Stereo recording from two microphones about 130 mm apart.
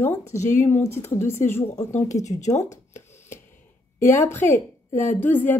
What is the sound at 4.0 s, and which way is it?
A woman's voice, 20° left (ahead or behind).